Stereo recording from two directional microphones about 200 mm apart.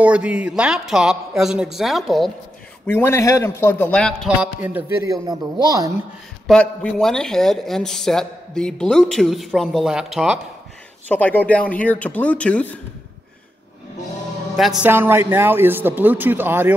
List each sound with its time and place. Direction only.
0.0 s speech: 5° right (ahead or behind)
2.9 s speech: 10° left (ahead or behind)
4.6 s a man's voice: 10° right (ahead or behind)
6.4 s speech: 5° left (ahead or behind)
11.1 s speech: 10° left (ahead or behind)
14.6 s a man's voice: 5° right (ahead or behind)